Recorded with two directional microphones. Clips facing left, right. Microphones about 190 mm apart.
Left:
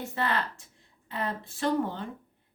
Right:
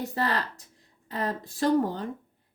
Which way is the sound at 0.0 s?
35° right (ahead or behind).